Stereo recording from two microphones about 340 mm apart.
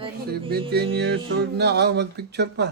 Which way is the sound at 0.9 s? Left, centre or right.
Right.